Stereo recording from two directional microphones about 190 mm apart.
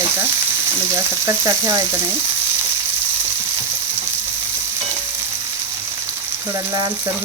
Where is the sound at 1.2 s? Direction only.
15° right (ahead or behind).